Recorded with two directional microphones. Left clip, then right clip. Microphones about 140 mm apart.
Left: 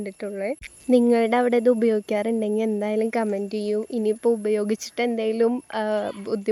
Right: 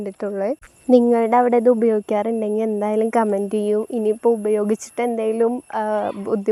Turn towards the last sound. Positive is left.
turn(degrees=5)  # may be behind; listen again after turning